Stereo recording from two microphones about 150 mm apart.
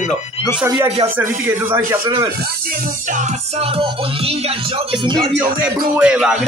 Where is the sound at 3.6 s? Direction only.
40° right (ahead or behind).